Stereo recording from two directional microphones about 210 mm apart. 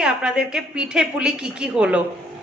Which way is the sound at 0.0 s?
5° right (ahead or behind).